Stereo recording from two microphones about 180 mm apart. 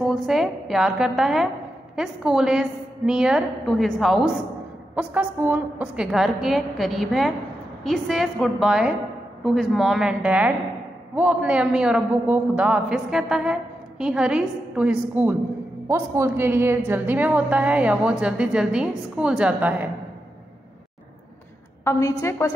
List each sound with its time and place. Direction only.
0.0 s a woman's voice: centre (ahead or behind)
21.9 s a woman's voice: 15° left (ahead or behind)